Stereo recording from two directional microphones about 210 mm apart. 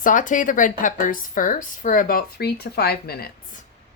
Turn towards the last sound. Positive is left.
turn(degrees=50)  # may be behind; listen again after turning